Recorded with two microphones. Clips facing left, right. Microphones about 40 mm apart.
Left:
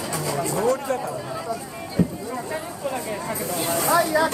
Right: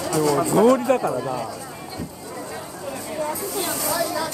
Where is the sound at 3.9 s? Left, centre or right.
Left.